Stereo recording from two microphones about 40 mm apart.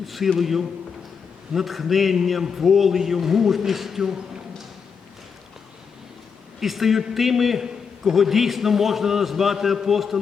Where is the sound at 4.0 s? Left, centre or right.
Centre.